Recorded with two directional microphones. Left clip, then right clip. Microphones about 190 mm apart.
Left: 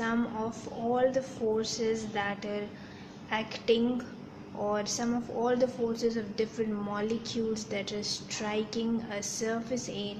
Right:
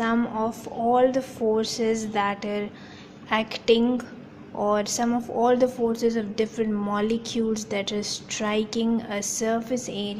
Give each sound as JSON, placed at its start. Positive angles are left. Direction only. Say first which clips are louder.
{"t": 0.0, "sound": "a woman's voice", "louder": "right 7 dB", "side_deg": -30}